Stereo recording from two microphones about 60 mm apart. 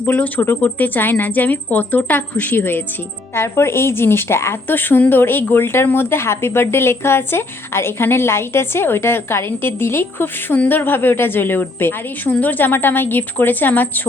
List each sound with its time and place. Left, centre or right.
0.0 s a woman's voice: left
3.3 s a woman's voice: left